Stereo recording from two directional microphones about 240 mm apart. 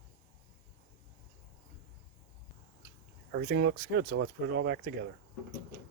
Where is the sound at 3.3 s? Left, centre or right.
Right.